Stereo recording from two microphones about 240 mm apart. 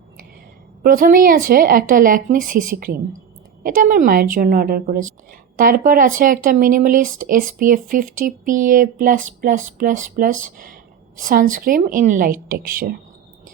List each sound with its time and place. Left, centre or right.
0.8 s speech: right